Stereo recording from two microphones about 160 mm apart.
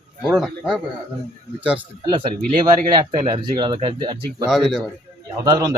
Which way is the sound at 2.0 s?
30° right (ahead or behind).